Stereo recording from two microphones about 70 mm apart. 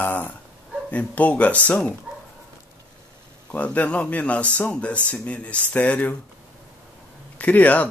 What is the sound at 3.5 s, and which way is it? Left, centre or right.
Speech, left.